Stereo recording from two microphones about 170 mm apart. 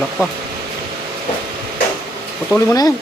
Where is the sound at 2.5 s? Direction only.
20° left (ahead or behind).